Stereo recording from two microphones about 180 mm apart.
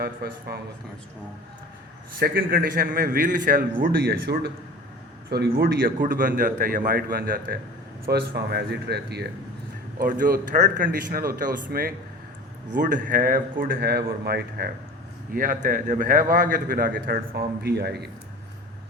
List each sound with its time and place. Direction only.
0.0 s speech: 60° right (ahead or behind)
2.1 s a man's voice: 55° right (ahead or behind)
10.0 s a man's voice: 50° right (ahead or behind)
15.3 s a man's voice: 50° right (ahead or behind)